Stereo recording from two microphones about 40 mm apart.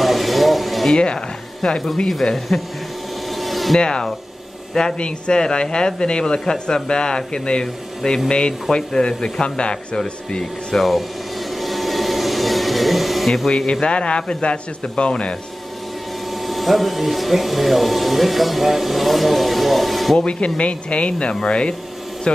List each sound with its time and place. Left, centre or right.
0.0 s a sound: centre
0.9 s speech: left
2.2 s speech: centre
3.3 s rub: centre
3.8 s speech: left
10.4 s speech: centre
11.6 s vacuum cleaner: centre
13.5 s speech: left
16.4 s speech: centre
20.2 s speech: left